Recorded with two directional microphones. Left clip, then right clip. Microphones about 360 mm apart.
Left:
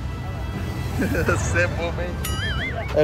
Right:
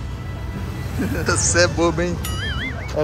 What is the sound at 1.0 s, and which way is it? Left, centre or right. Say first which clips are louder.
Speech: right 1 dB; centre.